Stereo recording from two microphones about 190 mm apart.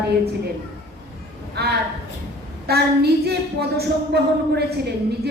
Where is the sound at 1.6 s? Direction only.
60° right (ahead or behind).